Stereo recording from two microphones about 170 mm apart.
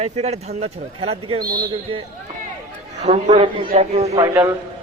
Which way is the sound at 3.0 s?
40° right (ahead or behind).